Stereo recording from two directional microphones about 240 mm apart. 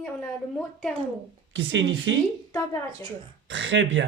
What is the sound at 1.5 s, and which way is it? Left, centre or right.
Speech, right.